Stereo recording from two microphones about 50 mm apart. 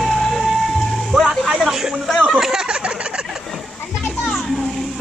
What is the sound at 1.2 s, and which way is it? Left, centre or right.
Music, centre.